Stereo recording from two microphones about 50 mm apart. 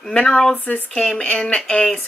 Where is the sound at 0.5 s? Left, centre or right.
Left.